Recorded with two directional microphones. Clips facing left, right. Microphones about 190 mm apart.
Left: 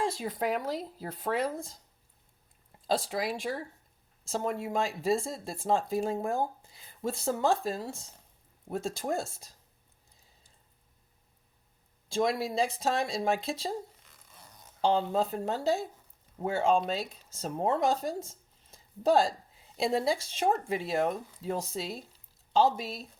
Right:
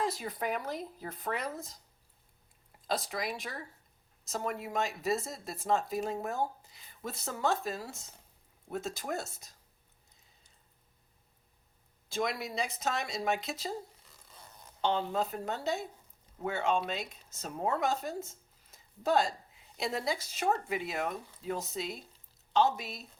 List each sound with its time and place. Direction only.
0.0 s speech: 25° left (ahead or behind)
2.8 s speech: 30° left (ahead or behind)
12.0 s speech: 30° left (ahead or behind)
14.8 s speech: 30° left (ahead or behind)